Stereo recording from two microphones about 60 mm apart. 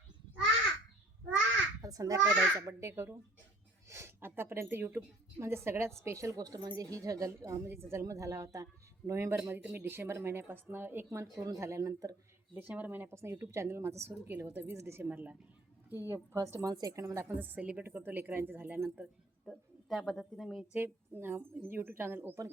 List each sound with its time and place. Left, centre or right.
1.8 s a child's voice: right
8.0 s a woman's voice: right
9.4 s a woman's voice: right
9.7 s a woman's voice: right
12.5 s a woman's voice: right
15.1 s a woman's voice: right
15.9 s a woman's voice: right
17.0 s a woman's voice: right
17.3 s a woman's voice: right
19.5 s speech: centre
20.7 s speech: right